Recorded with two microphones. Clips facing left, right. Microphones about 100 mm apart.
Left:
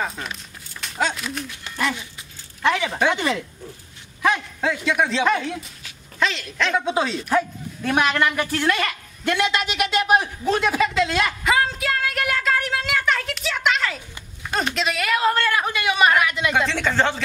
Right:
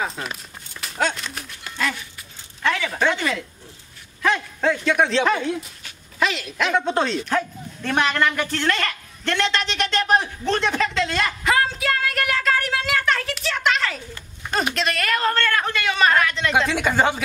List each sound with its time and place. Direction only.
0.7 s a sound: centre (ahead or behind)
1.8 s dog: 20° left (ahead or behind)
2.6 s speech: 20° left (ahead or behind)
4.2 s a sound: 15° left (ahead or behind)
4.6 s a man's voice: 5° left (ahead or behind)
16.5 s speech: 10° right (ahead or behind)